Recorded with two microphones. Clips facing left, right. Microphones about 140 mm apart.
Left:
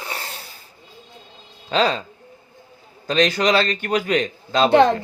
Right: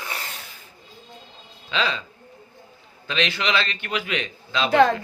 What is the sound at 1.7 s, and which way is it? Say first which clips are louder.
Speech: left 7 dB; 40° left (ahead or behind).